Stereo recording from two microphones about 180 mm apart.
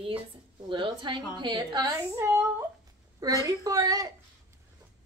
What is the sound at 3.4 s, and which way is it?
Speech, 20° right (ahead or behind).